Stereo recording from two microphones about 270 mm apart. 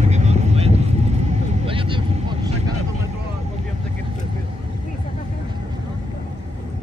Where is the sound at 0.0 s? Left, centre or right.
Right.